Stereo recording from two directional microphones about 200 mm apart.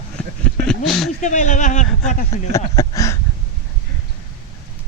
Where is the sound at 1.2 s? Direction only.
35° left (ahead or behind).